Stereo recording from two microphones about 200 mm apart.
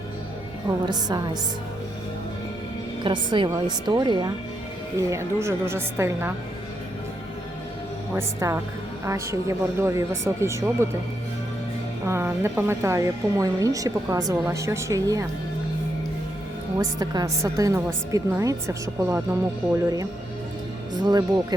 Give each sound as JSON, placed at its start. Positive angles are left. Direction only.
{"t": 0.7, "sound": "a woman's voice", "side_deg": -20}
{"t": 3.0, "sound": "a woman's voice", "side_deg": -25}
{"t": 8.1, "sound": "speech", "side_deg": -15}
{"t": 12.0, "sound": "speech", "side_deg": -15}
{"t": 16.7, "sound": "speech", "side_deg": -20}
{"t": 21.0, "sound": "a woman's voice", "side_deg": -20}